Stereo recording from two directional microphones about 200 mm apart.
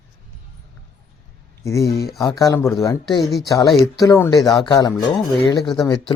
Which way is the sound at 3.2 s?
Centre (ahead or behind).